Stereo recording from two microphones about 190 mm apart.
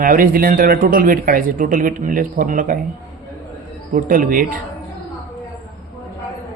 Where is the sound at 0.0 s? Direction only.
50° right (ahead or behind).